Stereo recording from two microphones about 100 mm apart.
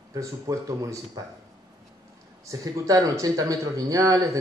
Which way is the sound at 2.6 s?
35° right (ahead or behind).